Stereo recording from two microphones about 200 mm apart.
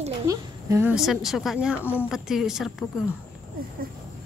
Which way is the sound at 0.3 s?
15° right (ahead or behind).